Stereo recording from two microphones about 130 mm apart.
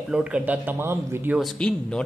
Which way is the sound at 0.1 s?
10° right (ahead or behind).